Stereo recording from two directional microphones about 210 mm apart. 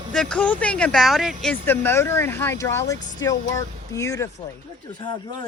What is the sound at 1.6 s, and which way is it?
Speech, 10° left (ahead or behind).